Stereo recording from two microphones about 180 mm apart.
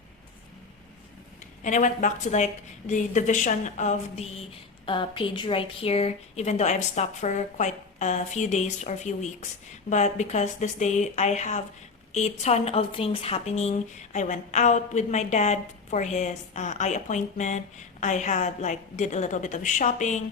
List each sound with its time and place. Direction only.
1.6 s a woman's voice: 45° left (ahead or behind)